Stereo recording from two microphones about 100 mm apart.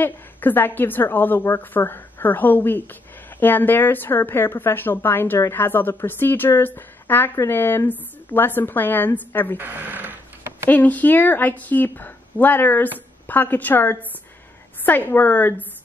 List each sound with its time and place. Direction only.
0.0 s a woman's voice: 20° left (ahead or behind)
9.6 s speech: 15° right (ahead or behind)
10.7 s a woman's voice: 15° left (ahead or behind)